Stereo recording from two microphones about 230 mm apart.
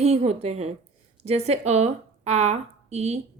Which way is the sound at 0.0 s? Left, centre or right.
Right.